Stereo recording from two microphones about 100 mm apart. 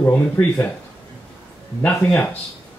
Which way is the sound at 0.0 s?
20° left (ahead or behind).